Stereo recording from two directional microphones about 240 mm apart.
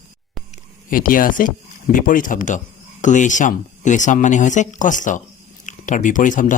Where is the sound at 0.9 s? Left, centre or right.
Left.